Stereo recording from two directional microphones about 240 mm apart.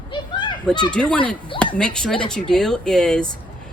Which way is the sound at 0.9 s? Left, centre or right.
Centre.